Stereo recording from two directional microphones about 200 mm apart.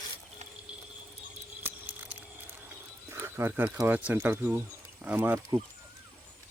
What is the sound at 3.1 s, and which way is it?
Speech, 10° right (ahead or behind).